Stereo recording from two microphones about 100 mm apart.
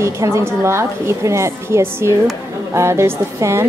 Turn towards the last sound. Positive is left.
turn(degrees=-25)  # may be behind; listen again after turning